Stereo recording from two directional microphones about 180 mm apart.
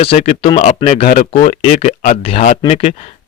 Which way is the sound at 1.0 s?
50° left (ahead or behind).